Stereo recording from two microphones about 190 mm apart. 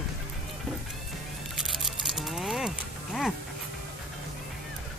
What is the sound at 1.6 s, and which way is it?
Livestock, centre (ahead or behind).